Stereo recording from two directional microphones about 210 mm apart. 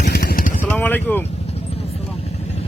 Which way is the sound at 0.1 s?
50° left (ahead or behind).